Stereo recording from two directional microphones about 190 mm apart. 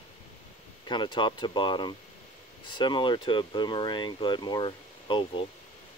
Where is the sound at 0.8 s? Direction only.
25° left (ahead or behind).